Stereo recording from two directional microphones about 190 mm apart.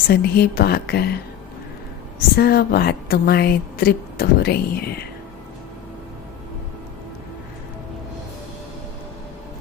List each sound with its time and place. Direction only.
0.1 s a woman's voice: 55° left (ahead or behind)